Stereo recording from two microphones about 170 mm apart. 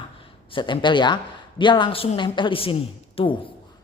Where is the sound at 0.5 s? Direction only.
25° left (ahead or behind).